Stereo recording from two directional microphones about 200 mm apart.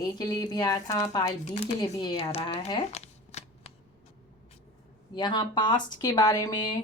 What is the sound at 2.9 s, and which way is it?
Shuffling cards, 35° left (ahead or behind).